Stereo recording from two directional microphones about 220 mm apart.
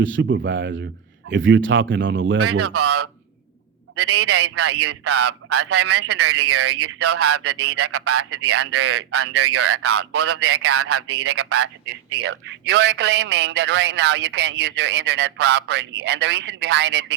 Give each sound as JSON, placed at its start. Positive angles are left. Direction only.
{"t": 0.0, "sound": "a man's voice", "side_deg": -60}
{"t": 12.1, "sound": "a man's voice", "side_deg": -60}